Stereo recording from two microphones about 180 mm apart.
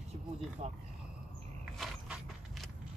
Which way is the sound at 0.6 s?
40° right (ahead or behind).